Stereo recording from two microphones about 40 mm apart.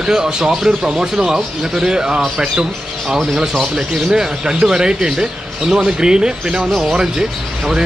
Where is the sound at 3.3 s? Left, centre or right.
Centre.